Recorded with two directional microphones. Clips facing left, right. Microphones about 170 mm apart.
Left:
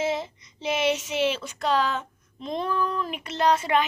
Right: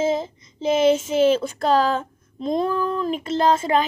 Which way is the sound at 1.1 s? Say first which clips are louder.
Right 8 dB; 45° right (ahead or behind).